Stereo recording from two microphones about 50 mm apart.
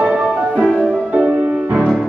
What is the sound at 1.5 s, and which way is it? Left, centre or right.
Music, right.